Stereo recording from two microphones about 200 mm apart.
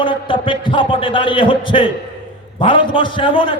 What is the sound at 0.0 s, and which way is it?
A man's voice, 25° left (ahead or behind).